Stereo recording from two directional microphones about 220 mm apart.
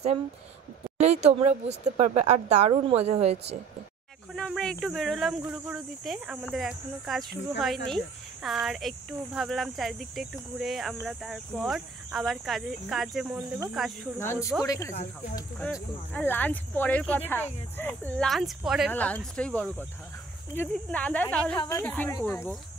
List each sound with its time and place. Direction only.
0.9 s speech: 30° right (ahead or behind)
4.4 s speech: 5° left (ahead or behind)
14.2 s speech: 10° left (ahead or behind)